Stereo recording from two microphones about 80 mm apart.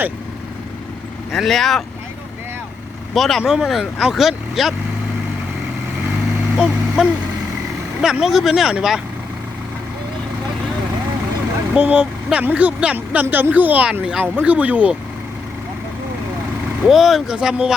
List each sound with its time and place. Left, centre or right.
1.3 s speech: centre
3.2 s speech: centre
6.6 s speech: centre
8.2 s speech: centre
11.7 s speech: centre
16.8 s speech: centre